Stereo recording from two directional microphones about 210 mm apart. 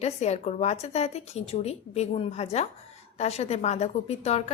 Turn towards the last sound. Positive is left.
turn(degrees=30)  # may be behind; listen again after turning